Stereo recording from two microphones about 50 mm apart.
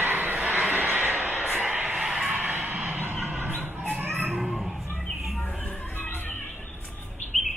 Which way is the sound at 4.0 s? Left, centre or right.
Right.